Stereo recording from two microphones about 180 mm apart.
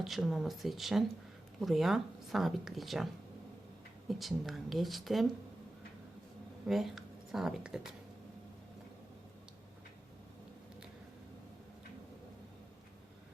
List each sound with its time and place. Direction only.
0.0 s speech: centre (ahead or behind)
4.1 s speech: centre (ahead or behind)
6.7 s speech: centre (ahead or behind)